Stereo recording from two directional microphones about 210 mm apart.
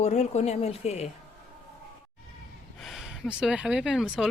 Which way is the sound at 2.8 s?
Centre (ahead or behind).